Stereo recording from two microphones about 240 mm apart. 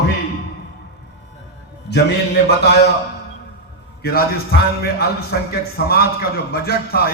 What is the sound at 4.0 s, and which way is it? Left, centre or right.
A man's voice, left.